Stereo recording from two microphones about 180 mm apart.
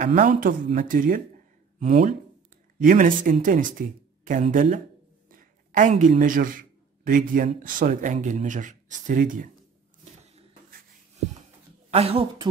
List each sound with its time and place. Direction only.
0.0 s speech: 45° right (ahead or behind)
1.8 s a woman's voice: 40° right (ahead or behind)
2.8 s speech: 50° right (ahead or behind)
11.9 s a woman's voice: 35° right (ahead or behind)